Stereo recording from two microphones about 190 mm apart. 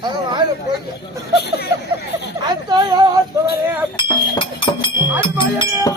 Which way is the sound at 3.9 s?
25° left (ahead or behind).